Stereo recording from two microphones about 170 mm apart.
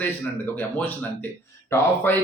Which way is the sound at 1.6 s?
10° left (ahead or behind).